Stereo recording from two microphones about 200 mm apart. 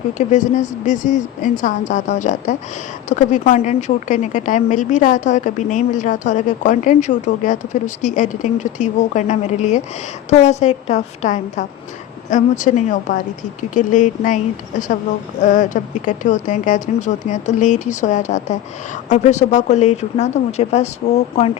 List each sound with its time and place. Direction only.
0.1 s speech: 35° left (ahead or behind)